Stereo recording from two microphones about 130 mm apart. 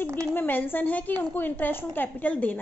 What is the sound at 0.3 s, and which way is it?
A woman's voice, 15° left (ahead or behind).